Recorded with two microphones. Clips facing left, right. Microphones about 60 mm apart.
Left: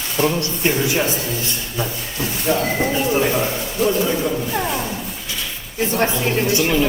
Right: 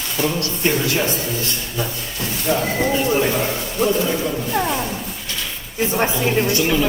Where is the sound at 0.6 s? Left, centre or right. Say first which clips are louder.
Even; centre.